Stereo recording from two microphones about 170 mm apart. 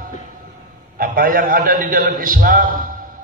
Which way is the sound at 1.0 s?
55° right (ahead or behind).